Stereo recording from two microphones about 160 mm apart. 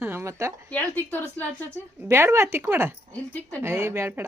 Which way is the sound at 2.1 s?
15° right (ahead or behind).